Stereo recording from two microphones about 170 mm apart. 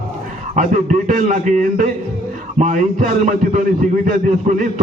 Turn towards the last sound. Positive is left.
turn(degrees=-45)  # may be behind; listen again after turning